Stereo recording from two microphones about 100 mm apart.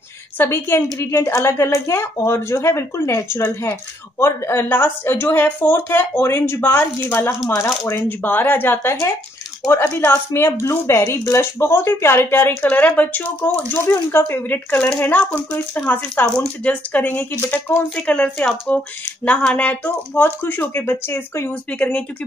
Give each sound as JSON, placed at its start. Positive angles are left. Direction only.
{"t": 0.4, "sound": "speech", "side_deg": 20}